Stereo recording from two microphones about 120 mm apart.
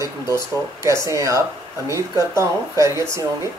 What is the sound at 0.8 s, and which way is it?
Speech, 25° right (ahead or behind).